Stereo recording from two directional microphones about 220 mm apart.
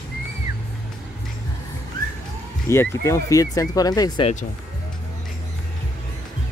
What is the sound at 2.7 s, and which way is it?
Speech, 10° left (ahead or behind).